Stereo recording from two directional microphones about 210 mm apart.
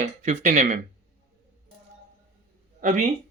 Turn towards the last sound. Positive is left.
turn(degrees=-40)  # may be behind; listen again after turning